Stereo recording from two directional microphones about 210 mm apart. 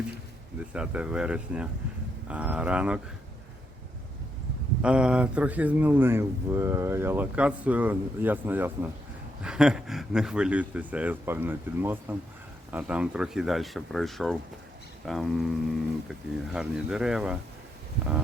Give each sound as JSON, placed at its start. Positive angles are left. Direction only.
{"t": 0.7, "sound": "speech", "side_deg": -5}
{"t": 4.8, "sound": "speech", "side_deg": -5}